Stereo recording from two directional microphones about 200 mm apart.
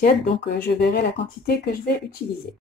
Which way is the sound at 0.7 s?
50° left (ahead or behind).